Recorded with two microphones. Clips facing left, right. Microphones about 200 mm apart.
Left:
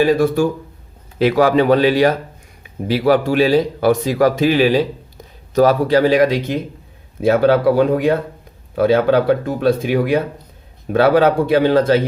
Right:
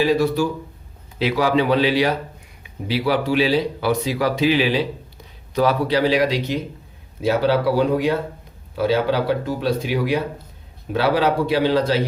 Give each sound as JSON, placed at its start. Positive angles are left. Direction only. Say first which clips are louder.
{"t": 0.0, "sound": "speech", "louder": "left 4 dB", "side_deg": 50}